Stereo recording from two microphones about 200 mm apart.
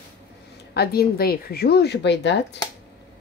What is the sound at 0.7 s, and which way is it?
Speech, 50° left (ahead or behind).